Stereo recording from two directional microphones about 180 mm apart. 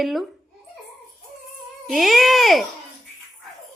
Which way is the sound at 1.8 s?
Centre (ahead or behind).